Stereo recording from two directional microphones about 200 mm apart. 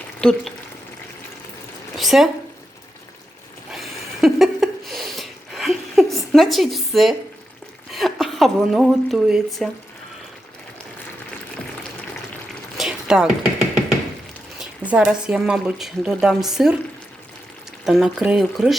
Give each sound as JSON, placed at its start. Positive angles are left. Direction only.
{"t": 0.2, "sound": "speech", "side_deg": 5}
{"t": 2.0, "sound": "speech", "side_deg": 0}
{"t": 3.7, "sound": "a sound", "side_deg": 0}
{"t": 7.9, "sound": "a woman's voice", "side_deg": 0}
{"t": 12.7, "sound": "a sound", "side_deg": 0}
{"t": 14.6, "sound": "speech", "side_deg": -5}
{"t": 17.8, "sound": "speech", "side_deg": 0}